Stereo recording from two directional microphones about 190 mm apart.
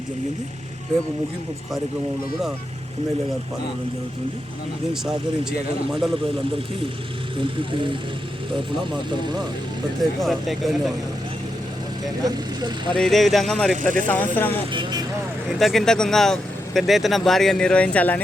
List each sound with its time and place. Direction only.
5.0 s speech: centre (ahead or behind)
9.0 s speech: 25° right (ahead or behind)
10.0 s speech: centre (ahead or behind)
12.2 s speech: 20° right (ahead or behind)
12.9 s speech: centre (ahead or behind)
13.8 s speech: 45° right (ahead or behind)
14.3 s speech: 10° left (ahead or behind)
14.7 s speech: 25° right (ahead or behind)
15.4 s speech: centre (ahead or behind)